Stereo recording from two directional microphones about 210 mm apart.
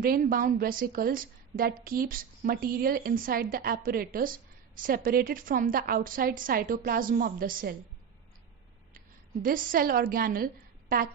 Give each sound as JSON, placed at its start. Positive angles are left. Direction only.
{"t": 0.0, "sound": "a woman's voice", "side_deg": -45}
{"t": 8.9, "sound": "a woman's voice", "side_deg": -40}